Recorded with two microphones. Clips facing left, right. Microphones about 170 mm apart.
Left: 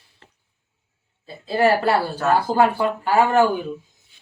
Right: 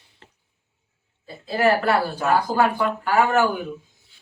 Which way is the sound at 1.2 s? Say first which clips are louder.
Left 2 dB; 30° left (ahead or behind).